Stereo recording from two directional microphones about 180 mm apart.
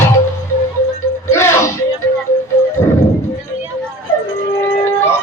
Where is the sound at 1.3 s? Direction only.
15° left (ahead or behind).